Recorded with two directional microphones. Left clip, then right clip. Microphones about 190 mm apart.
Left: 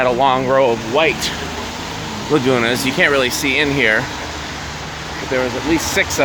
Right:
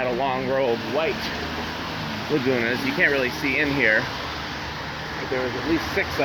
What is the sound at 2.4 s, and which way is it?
Speech, 30° left (ahead or behind).